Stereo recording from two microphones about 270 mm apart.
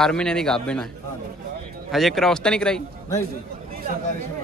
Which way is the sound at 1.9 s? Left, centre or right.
Centre.